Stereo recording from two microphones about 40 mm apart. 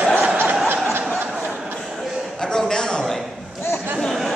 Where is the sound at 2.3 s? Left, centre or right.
Centre.